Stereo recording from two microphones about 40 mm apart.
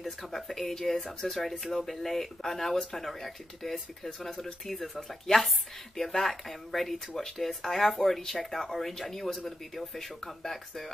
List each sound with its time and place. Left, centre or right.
0.0 s speech: centre